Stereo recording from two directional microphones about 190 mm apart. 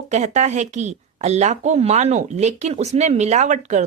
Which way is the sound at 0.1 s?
35° right (ahead or behind).